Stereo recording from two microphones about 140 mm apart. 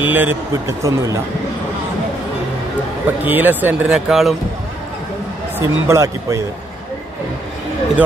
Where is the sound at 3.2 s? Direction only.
15° right (ahead or behind).